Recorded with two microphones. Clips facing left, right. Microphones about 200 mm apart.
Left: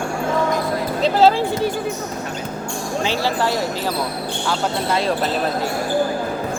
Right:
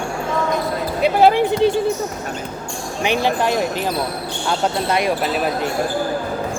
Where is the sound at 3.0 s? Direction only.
15° right (ahead or behind).